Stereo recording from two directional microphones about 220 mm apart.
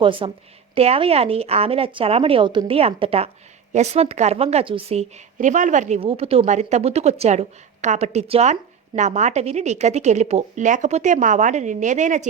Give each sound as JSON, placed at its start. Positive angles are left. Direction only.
{"t": 0.0, "sound": "a woman's voice", "side_deg": -25}